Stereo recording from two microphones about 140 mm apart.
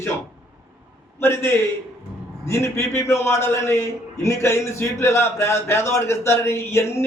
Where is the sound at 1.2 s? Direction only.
15° left (ahead or behind).